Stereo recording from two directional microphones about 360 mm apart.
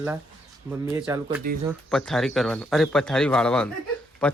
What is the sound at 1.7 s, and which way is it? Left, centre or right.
Speech, centre.